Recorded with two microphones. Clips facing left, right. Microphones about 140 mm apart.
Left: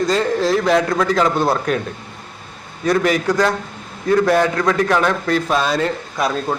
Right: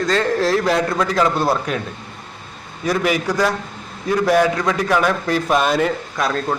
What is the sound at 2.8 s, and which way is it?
A man's voice, 10° right (ahead or behind).